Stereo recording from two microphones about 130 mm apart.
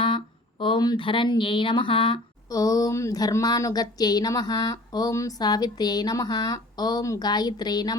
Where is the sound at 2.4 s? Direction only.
25° left (ahead or behind).